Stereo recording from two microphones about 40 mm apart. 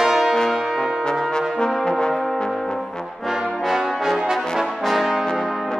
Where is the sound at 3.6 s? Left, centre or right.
Centre.